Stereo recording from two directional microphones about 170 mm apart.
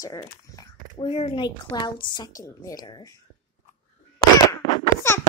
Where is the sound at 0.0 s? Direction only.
20° left (ahead or behind).